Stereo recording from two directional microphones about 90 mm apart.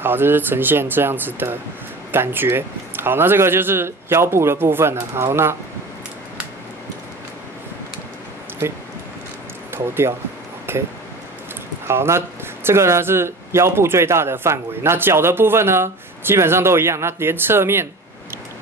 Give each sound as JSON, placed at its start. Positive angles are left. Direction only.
{"t": 0.0, "sound": "a man's voice", "side_deg": -25}
{"t": 8.6, "sound": "a man's voice", "side_deg": -25}
{"t": 11.9, "sound": "a man's voice", "side_deg": -30}